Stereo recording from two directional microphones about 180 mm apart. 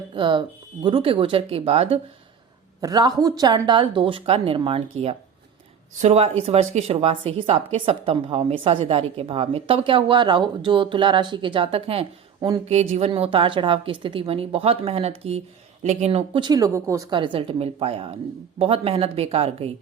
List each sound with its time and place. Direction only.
0.1 s a woman's voice: 25° right (ahead or behind)
2.8 s a woman's voice: 20° right (ahead or behind)